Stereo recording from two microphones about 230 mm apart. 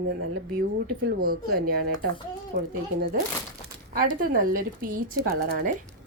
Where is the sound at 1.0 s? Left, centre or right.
Right.